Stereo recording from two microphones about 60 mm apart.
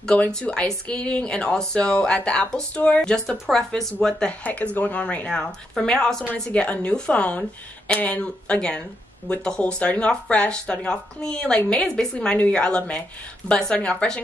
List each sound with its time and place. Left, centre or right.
0.0 s a woman's voice: left
3.3 s speech: centre
4.3 s speech: left
5.0 s a woman's voice: centre
6.3 s a woman's voice: left